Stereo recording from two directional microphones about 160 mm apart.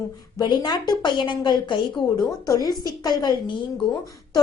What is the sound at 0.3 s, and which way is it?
A woman's voice, 25° left (ahead or behind).